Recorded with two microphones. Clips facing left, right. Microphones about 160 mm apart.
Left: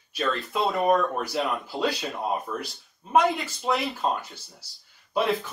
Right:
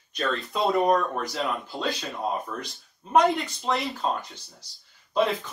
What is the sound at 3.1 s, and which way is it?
Speech, centre (ahead or behind).